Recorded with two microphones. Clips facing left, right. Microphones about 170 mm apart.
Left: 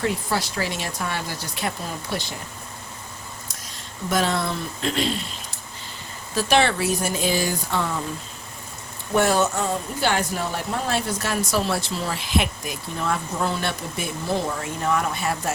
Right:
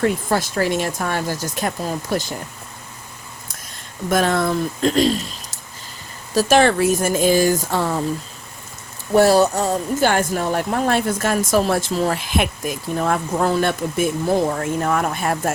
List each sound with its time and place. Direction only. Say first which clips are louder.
0.0 s speech: right 5 dB; 50° right (ahead or behind)
4.1 s speech: right 5 dB; 50° right (ahead or behind)
9.1 s speech: right 6 dB; 35° right (ahead or behind); by 15.5 s 50° right (ahead or behind)